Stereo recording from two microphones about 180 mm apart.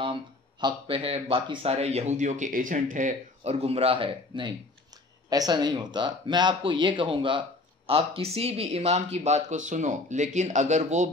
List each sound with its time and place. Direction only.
0.0 s speech: 25° right (ahead or behind)